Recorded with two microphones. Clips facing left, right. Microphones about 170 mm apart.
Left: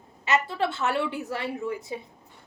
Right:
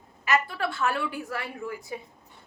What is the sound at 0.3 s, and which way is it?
A woman's voice, 25° left (ahead or behind).